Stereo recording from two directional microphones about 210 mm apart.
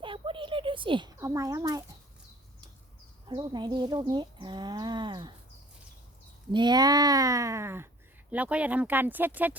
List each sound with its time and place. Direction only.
0.0 s a sound: 25° right (ahead or behind)
3.2 s speech: 20° right (ahead or behind)
6.5 s speech: 20° right (ahead or behind)